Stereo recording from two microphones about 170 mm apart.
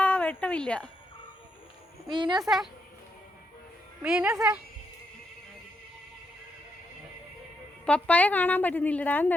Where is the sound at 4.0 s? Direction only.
5° right (ahead or behind).